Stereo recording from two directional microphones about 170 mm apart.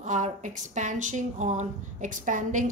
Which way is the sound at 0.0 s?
45° right (ahead or behind).